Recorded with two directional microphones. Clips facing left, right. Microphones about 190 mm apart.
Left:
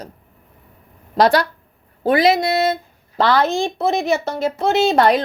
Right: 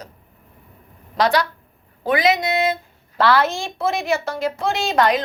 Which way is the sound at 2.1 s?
30° left (ahead or behind).